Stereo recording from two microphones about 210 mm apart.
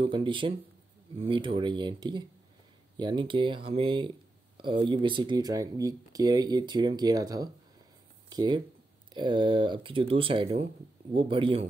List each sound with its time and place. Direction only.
0.0 s speech: 25° right (ahead or behind)